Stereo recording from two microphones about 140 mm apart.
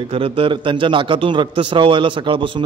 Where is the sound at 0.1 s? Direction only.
40° right (ahead or behind).